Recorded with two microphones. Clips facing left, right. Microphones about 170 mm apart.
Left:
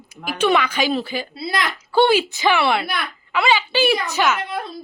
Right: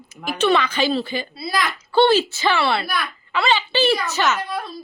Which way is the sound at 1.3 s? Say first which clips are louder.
Left 1 dB; 25° left (ahead or behind).